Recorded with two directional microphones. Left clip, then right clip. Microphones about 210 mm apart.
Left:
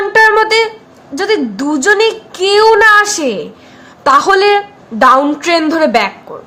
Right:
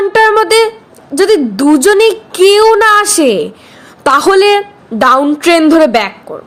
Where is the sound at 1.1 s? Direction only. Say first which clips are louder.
Right 5 dB; 25° right (ahead or behind).